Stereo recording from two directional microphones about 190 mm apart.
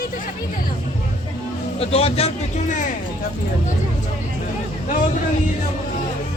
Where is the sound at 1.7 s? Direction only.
30° left (ahead or behind).